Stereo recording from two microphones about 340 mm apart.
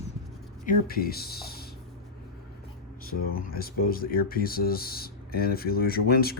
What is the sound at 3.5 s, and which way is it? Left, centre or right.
Speech, left.